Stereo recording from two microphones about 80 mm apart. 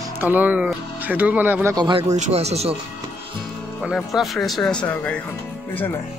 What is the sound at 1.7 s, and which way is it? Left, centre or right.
Speech, right.